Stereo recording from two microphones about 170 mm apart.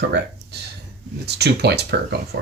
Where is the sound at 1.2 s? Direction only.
75° right (ahead or behind).